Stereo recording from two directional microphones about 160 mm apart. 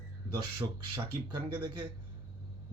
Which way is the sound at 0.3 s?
30° right (ahead or behind).